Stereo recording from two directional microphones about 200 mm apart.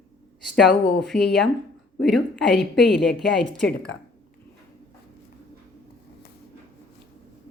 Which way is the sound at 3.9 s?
65° left (ahead or behind).